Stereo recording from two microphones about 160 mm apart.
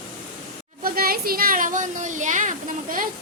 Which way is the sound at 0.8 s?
65° right (ahead or behind).